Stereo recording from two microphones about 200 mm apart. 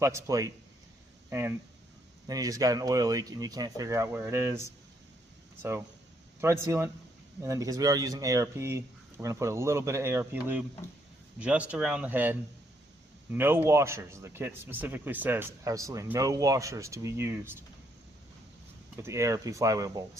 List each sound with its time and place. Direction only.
0.0 s a man's voice: 15° right (ahead or behind)
6.4 s a man's voice: 10° right (ahead or behind)
18.9 s a man's voice: 15° right (ahead or behind)